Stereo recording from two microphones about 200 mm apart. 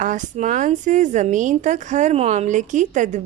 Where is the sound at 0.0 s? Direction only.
40° right (ahead or behind).